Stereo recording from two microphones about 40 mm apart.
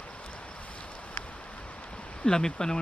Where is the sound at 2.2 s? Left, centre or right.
Centre.